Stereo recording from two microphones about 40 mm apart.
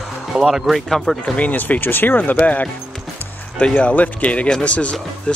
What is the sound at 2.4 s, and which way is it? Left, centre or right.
Speech, left.